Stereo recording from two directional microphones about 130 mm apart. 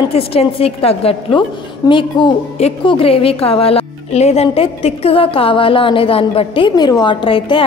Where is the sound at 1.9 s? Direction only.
35° left (ahead or behind).